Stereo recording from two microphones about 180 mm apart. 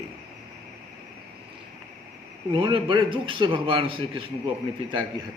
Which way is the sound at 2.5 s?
25° right (ahead or behind).